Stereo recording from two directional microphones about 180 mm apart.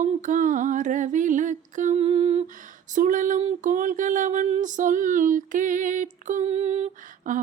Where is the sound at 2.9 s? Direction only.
45° right (ahead or behind).